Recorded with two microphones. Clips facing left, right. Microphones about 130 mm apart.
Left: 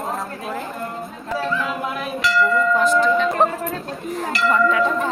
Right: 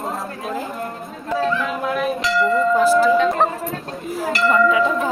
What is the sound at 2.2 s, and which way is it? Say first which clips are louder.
Speech: left 1 dB; 20° right (ahead or behind).